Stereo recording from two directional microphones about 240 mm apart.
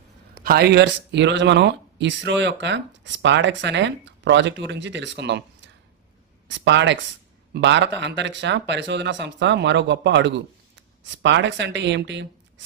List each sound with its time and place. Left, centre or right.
0.4 s speech: right